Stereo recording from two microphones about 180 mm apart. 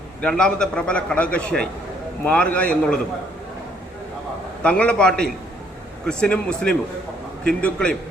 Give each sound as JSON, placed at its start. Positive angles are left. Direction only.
{"t": 0.2, "sound": "a man's voice", "side_deg": 5}
{"t": 4.6, "sound": "a man's voice", "side_deg": 5}